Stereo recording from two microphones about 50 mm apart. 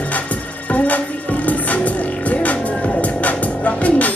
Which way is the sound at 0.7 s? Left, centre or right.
Left.